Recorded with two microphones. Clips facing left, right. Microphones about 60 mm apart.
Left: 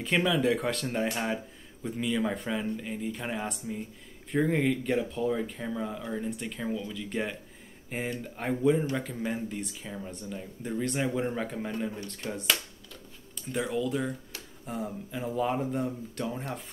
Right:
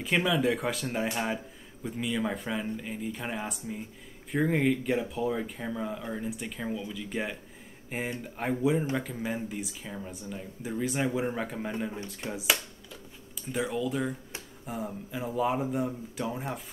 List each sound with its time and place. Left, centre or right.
0.0 s speech: centre